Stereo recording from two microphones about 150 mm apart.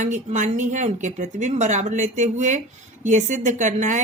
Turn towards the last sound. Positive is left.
turn(degrees=-55)  # may be behind; listen again after turning